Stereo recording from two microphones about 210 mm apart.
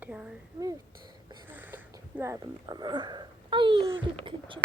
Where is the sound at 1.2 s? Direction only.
10° right (ahead or behind).